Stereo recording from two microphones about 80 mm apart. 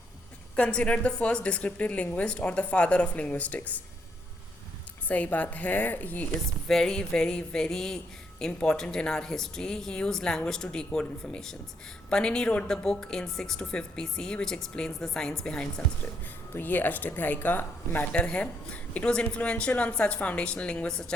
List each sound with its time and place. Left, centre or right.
0.5 s speech: centre
5.0 s speech: centre
6.7 s speech: centre
16.6 s speech: left